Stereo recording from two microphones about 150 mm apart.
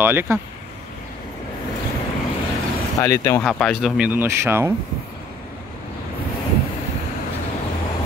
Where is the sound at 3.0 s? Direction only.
20° left (ahead or behind).